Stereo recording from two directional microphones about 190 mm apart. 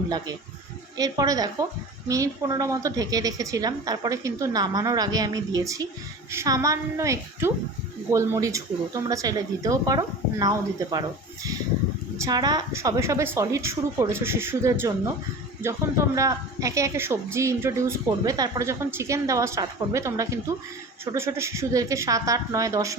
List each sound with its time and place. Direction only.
0.9 s a woman's voice: 20° right (ahead or behind)
12.2 s speech: 20° right (ahead or behind)